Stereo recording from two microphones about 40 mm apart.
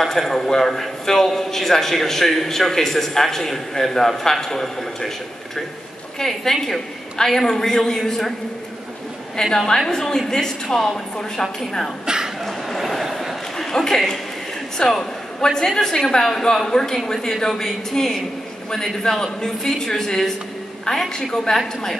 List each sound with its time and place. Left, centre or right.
0.0 s a man's voice: centre
6.1 s a man's voice: centre
9.4 s a man's voice: centre
12.1 s a sound: centre
12.4 s a sound: centre
13.6 s a man's voice: centre